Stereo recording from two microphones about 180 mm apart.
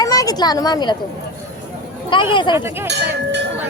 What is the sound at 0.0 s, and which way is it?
Speech, 20° left (ahead or behind).